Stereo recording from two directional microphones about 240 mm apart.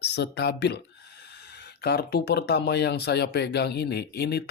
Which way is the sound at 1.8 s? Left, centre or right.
Left.